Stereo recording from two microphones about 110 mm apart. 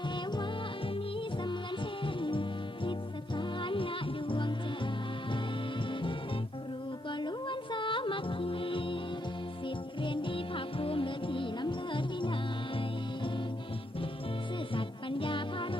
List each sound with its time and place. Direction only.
2.0 s music: 50° left (ahead or behind)
5.9 s music: 50° left (ahead or behind)
14.7 s music: 50° left (ahead or behind)